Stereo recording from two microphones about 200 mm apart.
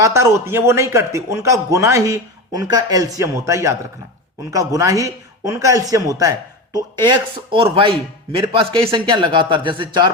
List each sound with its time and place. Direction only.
0.0 s a man's voice: 15° right (ahead or behind)